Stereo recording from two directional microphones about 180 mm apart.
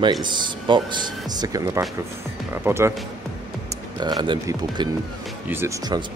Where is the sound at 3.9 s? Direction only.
25° right (ahead or behind).